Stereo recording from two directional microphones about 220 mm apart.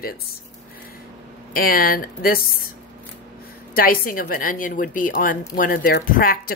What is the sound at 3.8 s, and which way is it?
A woman's voice, 40° left (ahead or behind).